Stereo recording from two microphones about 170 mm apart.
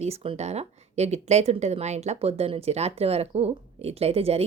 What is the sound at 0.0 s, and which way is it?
A woman's voice, 35° right (ahead or behind).